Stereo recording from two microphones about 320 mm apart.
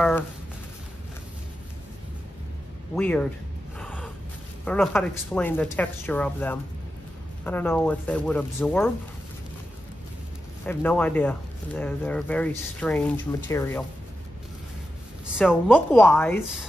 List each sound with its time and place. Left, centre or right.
3.0 s speech: centre
4.6 s speech: centre
10.6 s speech: centre
15.3 s speech: centre